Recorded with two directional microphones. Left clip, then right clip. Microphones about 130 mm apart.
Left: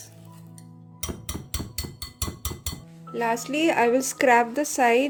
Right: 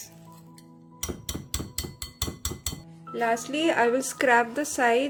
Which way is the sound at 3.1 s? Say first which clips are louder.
Left 1 dB; 45° left (ahead or behind).